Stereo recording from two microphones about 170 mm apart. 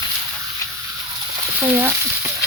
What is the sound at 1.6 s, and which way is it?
Frying, 15° right (ahead or behind).